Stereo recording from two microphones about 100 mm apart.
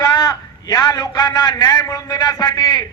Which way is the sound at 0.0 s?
40° left (ahead or behind).